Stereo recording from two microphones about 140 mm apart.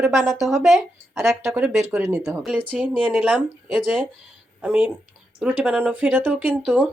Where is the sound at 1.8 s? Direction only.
20° right (ahead or behind).